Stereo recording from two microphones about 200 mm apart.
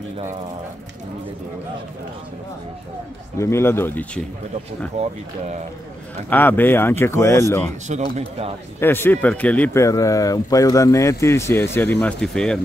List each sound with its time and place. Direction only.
3.3 s speech: 15° left (ahead or behind)
4.9 s speech: 30° right (ahead or behind)
6.3 s speech: 10° left (ahead or behind)
7.9 s speech: 30° right (ahead or behind)
8.7 s speech: 10° left (ahead or behind)